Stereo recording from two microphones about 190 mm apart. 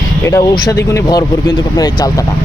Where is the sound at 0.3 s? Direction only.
20° left (ahead or behind).